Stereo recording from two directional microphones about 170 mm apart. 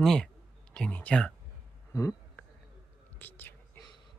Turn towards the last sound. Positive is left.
turn(degrees=10)  # may be behind; listen again after turning